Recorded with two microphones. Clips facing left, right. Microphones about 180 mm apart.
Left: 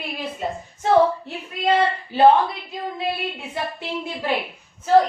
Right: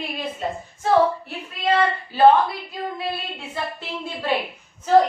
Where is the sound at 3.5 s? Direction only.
15° left (ahead or behind).